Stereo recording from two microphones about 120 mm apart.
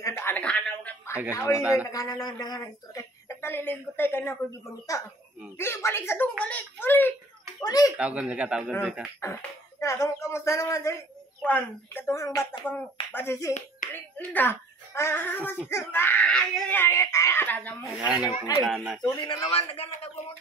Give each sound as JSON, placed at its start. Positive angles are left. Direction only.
{"t": 0.0, "sound": "a sound", "side_deg": 20}
{"t": 1.3, "sound": "speech", "side_deg": 25}
{"t": 1.6, "sound": "speech", "side_deg": -10}
{"t": 1.9, "sound": "a woman's voice", "side_deg": 30}
{"t": 4.9, "sound": "speech", "side_deg": 30}
{"t": 7.6, "sound": "speech", "side_deg": 30}
{"t": 8.0, "sound": "speech", "side_deg": -10}
{"t": 9.2, "sound": "a sound", "side_deg": 25}
{"t": 10.0, "sound": "speech", "side_deg": 25}
{"t": 13.5, "sound": "speech", "side_deg": 80}
{"t": 13.9, "sound": "a child's voice", "side_deg": 15}
{"t": 18.0, "sound": "speech", "side_deg": -10}
{"t": 19.1, "sound": "speech", "side_deg": 40}
{"t": 19.5, "sound": "a man's voice", "side_deg": 55}